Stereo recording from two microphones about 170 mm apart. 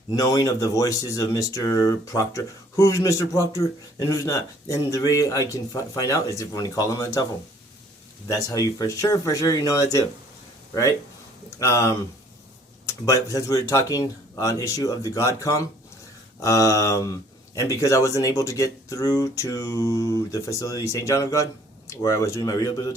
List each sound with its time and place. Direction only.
0.2 s speech: 20° left (ahead or behind)
8.3 s speech: 20° left (ahead or behind)
11.6 s speech: 20° left (ahead or behind)
13.1 s speech: 20° left (ahead or behind)